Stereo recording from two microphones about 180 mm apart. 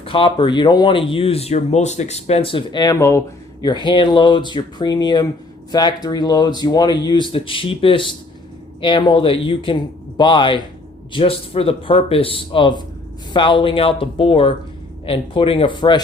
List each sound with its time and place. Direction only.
0.0 s speech: 30° left (ahead or behind)